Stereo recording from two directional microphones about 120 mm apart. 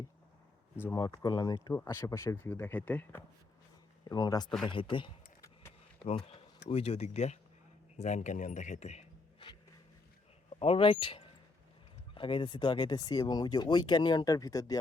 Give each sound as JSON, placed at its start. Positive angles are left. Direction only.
{"t": 0.9, "sound": "speech", "side_deg": 30}
{"t": 1.7, "sound": "speech", "side_deg": 20}
{"t": 4.1, "sound": "speech", "side_deg": 35}
{"t": 4.6, "sound": "speech", "side_deg": 45}
{"t": 6.2, "sound": "speech", "side_deg": 55}
{"t": 7.9, "sound": "speech", "side_deg": 85}
{"t": 10.6, "sound": "speech", "side_deg": 50}